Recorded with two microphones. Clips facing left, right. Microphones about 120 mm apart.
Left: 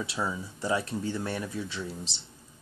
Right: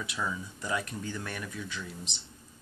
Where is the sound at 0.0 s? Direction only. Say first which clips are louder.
Left 3 dB; 30° left (ahead or behind).